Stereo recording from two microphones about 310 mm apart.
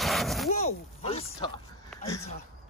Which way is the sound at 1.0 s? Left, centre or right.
Centre.